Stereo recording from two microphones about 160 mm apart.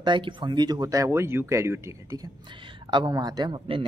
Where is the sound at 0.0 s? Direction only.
30° right (ahead or behind).